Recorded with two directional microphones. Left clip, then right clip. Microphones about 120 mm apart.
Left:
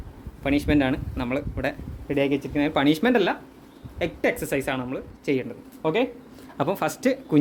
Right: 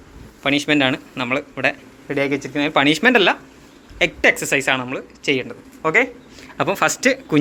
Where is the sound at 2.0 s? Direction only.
25° left (ahead or behind).